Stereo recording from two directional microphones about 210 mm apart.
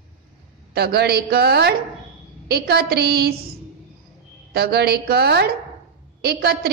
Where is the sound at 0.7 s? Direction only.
50° right (ahead or behind).